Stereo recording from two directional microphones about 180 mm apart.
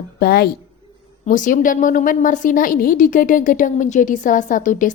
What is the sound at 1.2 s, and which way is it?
A woman's voice, 45° left (ahead or behind).